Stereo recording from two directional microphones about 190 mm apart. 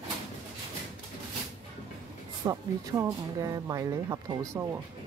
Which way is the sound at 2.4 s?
20° right (ahead or behind).